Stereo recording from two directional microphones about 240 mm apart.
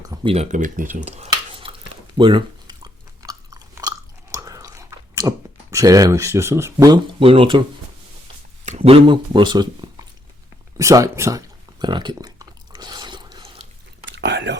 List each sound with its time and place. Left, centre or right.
0.0 s speech: centre
2.1 s chewing: centre
5.7 s speech: centre
8.6 s speech: right
10.8 s a sound: centre
14.0 s whispering: right